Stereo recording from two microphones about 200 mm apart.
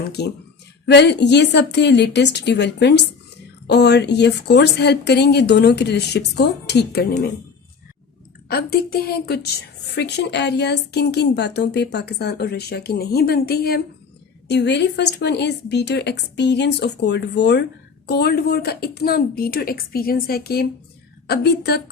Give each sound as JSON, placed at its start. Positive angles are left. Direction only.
{"t": 0.2, "sound": "speech", "side_deg": 55}
{"t": 8.4, "sound": "a woman's voice", "side_deg": 50}